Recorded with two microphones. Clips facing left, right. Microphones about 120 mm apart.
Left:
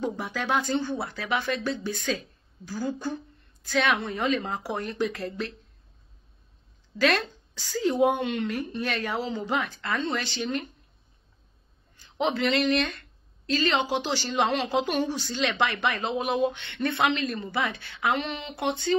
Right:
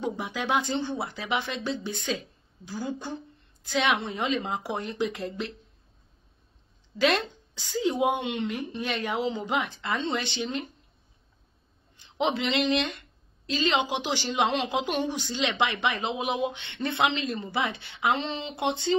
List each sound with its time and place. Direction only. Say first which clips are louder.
0.0 s a woman's voice: left 1 dB; 15° right (ahead or behind)
7.0 s a woman's voice: even; 15° right (ahead or behind)
12.0 s speech: left 1 dB; 20° right (ahead or behind)